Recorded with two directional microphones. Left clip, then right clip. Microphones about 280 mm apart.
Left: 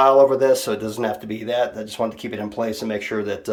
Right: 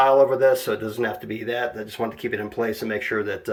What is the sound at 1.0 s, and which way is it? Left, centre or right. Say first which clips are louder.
Speech: left 2 dB; centre.